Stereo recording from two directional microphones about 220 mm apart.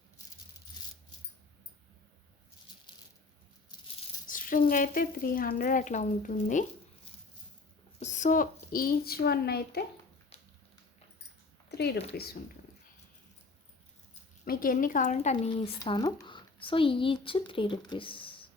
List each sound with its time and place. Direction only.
4.3 s a woman's voice: 40° left (ahead or behind)
7.9 s a woman's voice: 30° left (ahead or behind)
11.7 s a sound: 50° left (ahead or behind)
12.1 s speech: 45° left (ahead or behind)
14.4 s speech: 40° left (ahead or behind); by 18.4 s 25° left (ahead or behind)